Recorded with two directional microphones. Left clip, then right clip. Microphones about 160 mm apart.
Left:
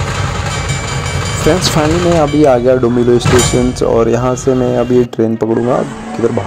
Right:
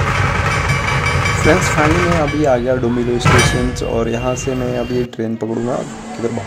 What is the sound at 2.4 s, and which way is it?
Speech, 30° left (ahead or behind).